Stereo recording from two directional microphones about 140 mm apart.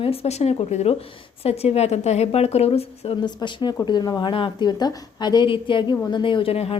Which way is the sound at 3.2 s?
30° left (ahead or behind).